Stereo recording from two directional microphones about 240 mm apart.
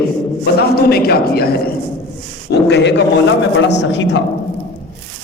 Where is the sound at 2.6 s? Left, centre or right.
Left.